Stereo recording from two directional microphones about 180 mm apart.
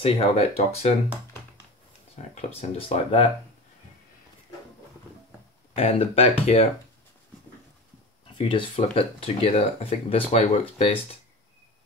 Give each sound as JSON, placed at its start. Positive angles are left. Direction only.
{"t": 0.0, "sound": "speech", "side_deg": 35}
{"t": 2.1, "sound": "speech", "side_deg": 35}
{"t": 5.8, "sound": "speech", "side_deg": 35}
{"t": 8.4, "sound": "speech", "side_deg": 30}